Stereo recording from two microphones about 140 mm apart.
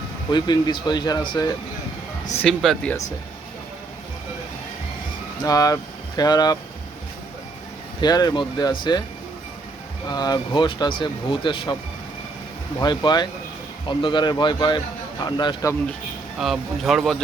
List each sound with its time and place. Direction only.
0.3 s speech: 30° left (ahead or behind)
2.4 s a man's voice: 5° left (ahead or behind)
5.4 s speech: 25° left (ahead or behind)
8.0 s speech: 30° left (ahead or behind)
10.1 s speech: 30° left (ahead or behind)
12.8 s speech: 30° left (ahead or behind)
16.4 s a man's voice: centre (ahead or behind)